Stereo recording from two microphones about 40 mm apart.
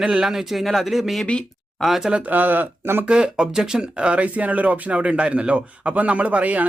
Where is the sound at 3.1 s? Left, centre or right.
Right.